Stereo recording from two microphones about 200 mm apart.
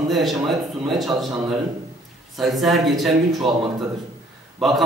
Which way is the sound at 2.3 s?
Centre (ahead or behind).